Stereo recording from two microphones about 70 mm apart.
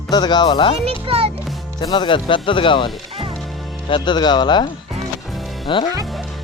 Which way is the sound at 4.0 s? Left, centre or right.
Left.